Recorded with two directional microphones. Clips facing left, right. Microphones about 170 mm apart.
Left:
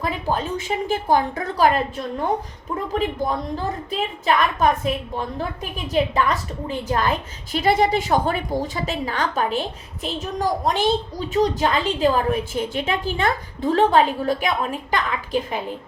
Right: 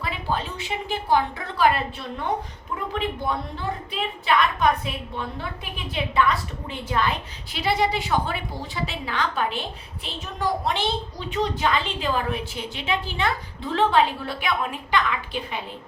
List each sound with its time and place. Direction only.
0.0 s a woman's voice: 45° left (ahead or behind)